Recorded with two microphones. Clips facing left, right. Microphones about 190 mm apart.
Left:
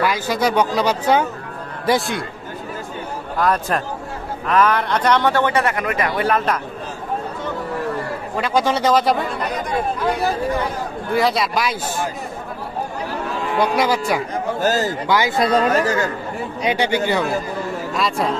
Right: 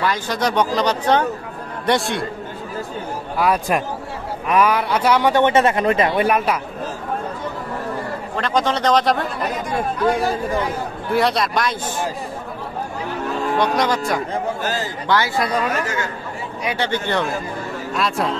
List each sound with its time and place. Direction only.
0.0 s speech: 10° left (ahead or behind)
3.3 s speech: 10° right (ahead or behind)
5.4 s speech: 25° right (ahead or behind)
8.4 s speech: 10° left (ahead or behind)
11.1 s speech: centre (ahead or behind)
13.6 s speech: 5° left (ahead or behind)
14.6 s a man's voice: 40° left (ahead or behind)
15.0 s speech: 15° left (ahead or behind)
15.7 s speech: 35° left (ahead or behind)
16.6 s speech: 15° left (ahead or behind)